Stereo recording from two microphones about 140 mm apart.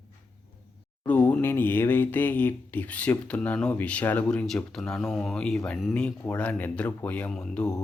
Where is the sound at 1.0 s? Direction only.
10° left (ahead or behind).